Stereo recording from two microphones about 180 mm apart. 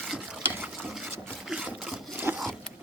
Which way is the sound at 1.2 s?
5° right (ahead or behind).